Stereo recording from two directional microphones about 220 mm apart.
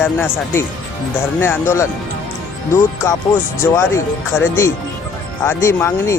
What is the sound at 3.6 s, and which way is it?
Speech, 10° left (ahead or behind).